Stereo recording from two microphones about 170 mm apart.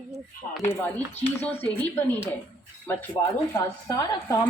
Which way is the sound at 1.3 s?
10° left (ahead or behind).